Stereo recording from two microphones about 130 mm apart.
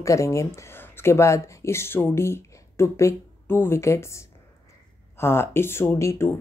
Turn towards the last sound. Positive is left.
turn(degrees=20)  # may be behind; listen again after turning